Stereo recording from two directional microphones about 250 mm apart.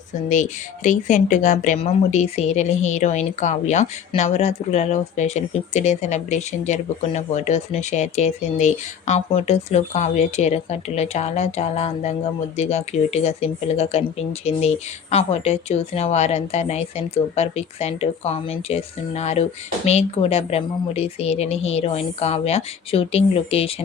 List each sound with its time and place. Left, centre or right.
0.3 s speech: left